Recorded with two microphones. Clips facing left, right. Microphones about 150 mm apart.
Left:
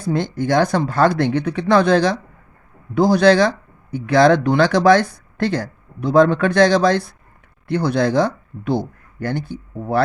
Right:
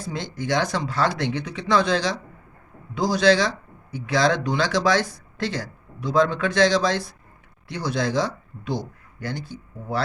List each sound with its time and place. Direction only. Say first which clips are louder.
0.0 s speech: left 9 dB; 55° left (ahead or behind)